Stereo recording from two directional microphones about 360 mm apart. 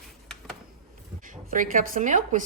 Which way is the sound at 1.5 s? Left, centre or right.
Right.